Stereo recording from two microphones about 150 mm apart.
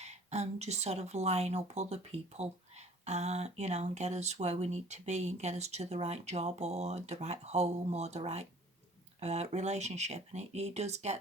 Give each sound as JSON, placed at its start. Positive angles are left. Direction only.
{"t": 0.0, "sound": "speech", "side_deg": -45}